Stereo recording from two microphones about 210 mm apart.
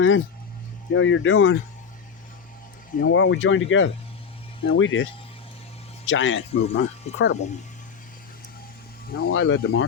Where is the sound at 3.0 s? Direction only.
65° left (ahead or behind).